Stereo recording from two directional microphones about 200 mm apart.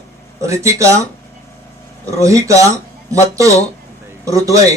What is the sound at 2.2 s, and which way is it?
Speech, 15° right (ahead or behind).